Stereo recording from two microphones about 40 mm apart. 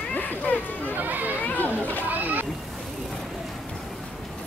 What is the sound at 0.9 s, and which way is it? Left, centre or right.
Chatter, right.